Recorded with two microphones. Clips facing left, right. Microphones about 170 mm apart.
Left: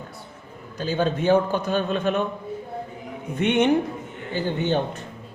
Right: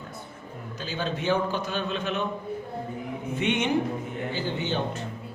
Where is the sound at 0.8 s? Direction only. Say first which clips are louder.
Left 8 dB; 50° left (ahead or behind).